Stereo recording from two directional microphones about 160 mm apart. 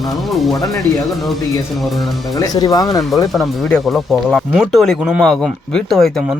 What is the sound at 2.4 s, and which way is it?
Speech, 25° left (ahead or behind).